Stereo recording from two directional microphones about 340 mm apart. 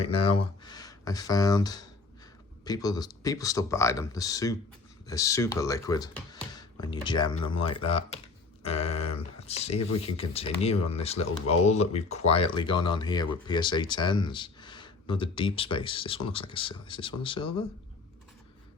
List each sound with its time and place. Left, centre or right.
0.0 s speech: centre
8.6 s a sound: centre
10.0 s speech: centre